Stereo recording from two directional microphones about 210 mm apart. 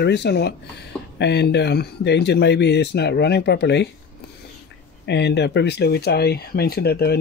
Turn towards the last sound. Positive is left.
turn(degrees=50)  # may be behind; listen again after turning